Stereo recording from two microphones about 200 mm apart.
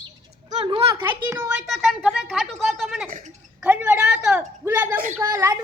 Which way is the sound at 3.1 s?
35° right (ahead or behind).